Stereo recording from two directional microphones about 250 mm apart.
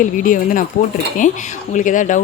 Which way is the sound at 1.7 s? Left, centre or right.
Left.